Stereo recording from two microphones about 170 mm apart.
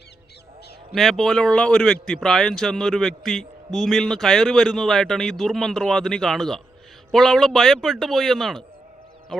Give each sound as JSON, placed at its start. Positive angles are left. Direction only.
{"t": 0.9, "sound": "speech", "side_deg": 0}